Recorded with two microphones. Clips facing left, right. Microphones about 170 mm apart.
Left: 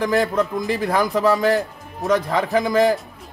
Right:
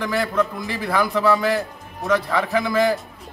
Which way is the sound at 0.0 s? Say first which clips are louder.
Left 3 dB; 40° left (ahead or behind).